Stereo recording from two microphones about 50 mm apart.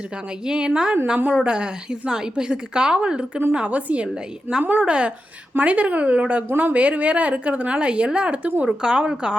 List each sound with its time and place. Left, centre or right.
0.4 s a woman's voice: centre
4.6 s speech: right
4.9 s a woman's voice: right